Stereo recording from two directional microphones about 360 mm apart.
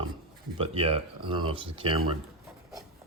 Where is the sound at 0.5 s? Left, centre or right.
Centre.